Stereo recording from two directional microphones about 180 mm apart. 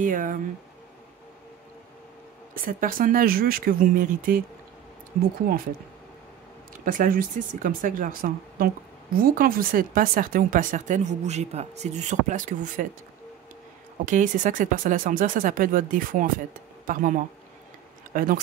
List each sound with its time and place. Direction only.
0.0 s speech: 50° right (ahead or behind)
2.5 s speech: 50° right (ahead or behind)
6.8 s speech: 50° right (ahead or behind)
14.0 s speech: 45° right (ahead or behind)